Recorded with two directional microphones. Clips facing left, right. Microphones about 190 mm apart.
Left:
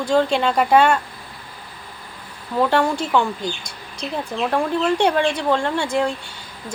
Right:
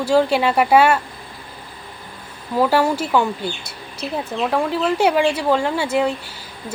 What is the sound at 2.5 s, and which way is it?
Speech, 5° right (ahead or behind).